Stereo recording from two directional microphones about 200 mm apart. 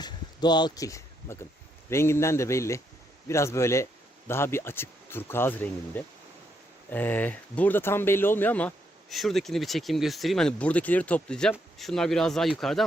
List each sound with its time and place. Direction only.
0.0 s speech: 20° left (ahead or behind); by 12.8 s centre (ahead or behind)